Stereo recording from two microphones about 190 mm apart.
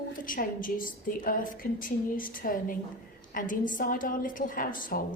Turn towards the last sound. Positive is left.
turn(degrees=45)  # may be behind; listen again after turning